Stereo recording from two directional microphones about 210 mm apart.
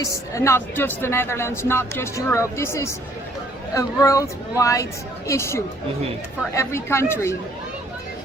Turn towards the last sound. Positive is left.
turn(degrees=10)  # may be behind; listen again after turning